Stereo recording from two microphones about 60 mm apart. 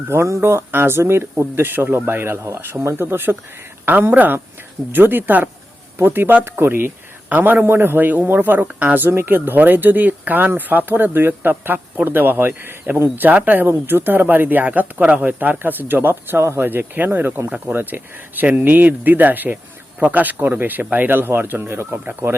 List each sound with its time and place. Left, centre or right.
0.1 s speech: right
9.0 s speech: right
16.4 s speech: right
16.6 s speech: right